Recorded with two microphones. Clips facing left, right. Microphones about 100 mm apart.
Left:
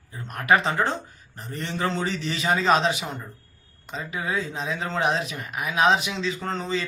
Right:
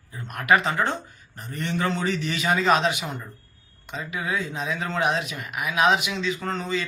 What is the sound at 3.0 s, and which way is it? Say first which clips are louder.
Speech: even; centre (ahead or behind).